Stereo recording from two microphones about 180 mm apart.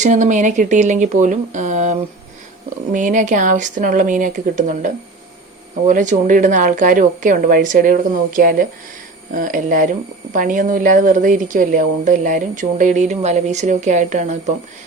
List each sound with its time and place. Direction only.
0.0 s a woman's voice: 45° right (ahead or behind)